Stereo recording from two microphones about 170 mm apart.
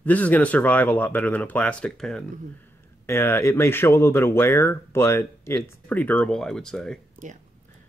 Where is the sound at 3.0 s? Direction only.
15° left (ahead or behind).